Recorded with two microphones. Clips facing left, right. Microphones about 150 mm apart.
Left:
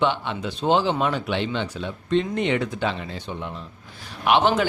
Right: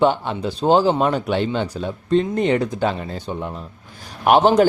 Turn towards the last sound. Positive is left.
turn(degrees=-45)  # may be behind; listen again after turning